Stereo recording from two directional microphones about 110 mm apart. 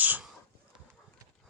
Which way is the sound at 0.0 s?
15° right (ahead or behind).